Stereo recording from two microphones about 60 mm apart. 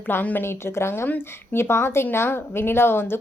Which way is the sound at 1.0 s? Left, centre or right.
Left.